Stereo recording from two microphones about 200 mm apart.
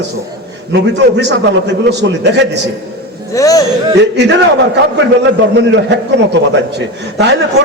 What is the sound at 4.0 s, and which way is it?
A man's voice, 60° right (ahead or behind).